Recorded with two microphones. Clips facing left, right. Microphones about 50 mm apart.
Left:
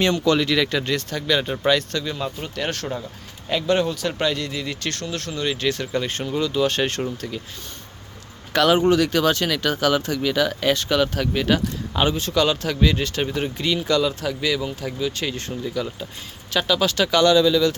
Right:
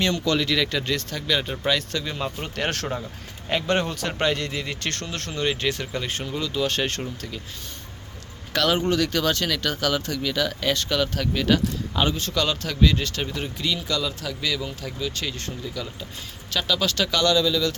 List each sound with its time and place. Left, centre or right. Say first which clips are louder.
0.0 s speech: left 4 dB; centre
1.9 s speech: left 3 dB; centre
2.4 s speech: even; right; by 5.9 s centre
5.9 s speech: left 4 dB; centre
8.5 s speech: left 5 dB; centre
13.3 s speech: left 4 dB; left
14.4 s speech: left 3 dB; centre